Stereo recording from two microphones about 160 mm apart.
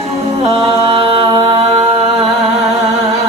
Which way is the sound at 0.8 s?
40° right (ahead or behind).